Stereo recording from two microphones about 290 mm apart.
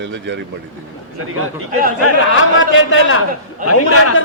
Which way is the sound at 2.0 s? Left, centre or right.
Left.